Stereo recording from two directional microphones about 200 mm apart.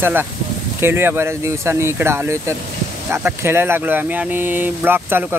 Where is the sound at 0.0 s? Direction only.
10° right (ahead or behind).